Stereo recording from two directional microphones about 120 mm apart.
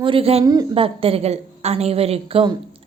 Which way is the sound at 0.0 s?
50° right (ahead or behind).